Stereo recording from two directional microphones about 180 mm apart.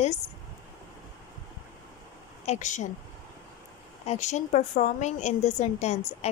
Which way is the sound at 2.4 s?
40° left (ahead or behind).